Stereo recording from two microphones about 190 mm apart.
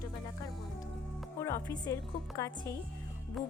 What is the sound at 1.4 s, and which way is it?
A woman's voice, 15° left (ahead or behind).